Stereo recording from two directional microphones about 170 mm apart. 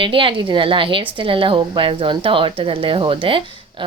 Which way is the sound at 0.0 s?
30° right (ahead or behind).